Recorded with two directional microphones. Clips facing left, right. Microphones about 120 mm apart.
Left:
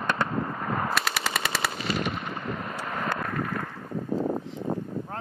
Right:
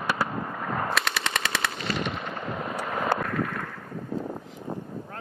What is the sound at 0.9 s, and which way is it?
Machine gun, 5° left (ahead or behind).